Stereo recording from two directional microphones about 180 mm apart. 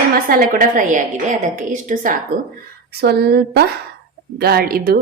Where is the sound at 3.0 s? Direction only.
65° right (ahead or behind).